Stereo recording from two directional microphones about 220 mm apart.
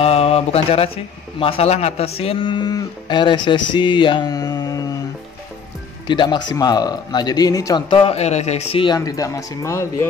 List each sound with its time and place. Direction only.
0.0 s speech: 25° left (ahead or behind)
6.0 s speech: 20° left (ahead or behind)